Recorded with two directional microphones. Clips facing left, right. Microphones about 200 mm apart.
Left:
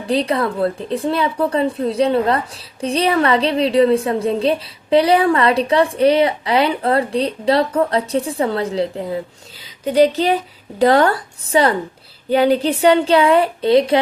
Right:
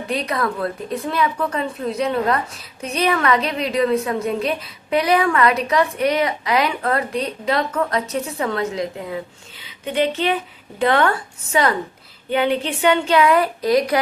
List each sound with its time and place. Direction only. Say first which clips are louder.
0.1 s a woman's voice: left 5 dB; 30° left (ahead or behind)